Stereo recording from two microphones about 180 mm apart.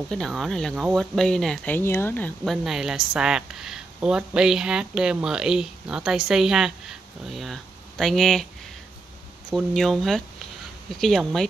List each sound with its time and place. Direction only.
0.1 s speech: centre (ahead or behind)
9.5 s speech: centre (ahead or behind)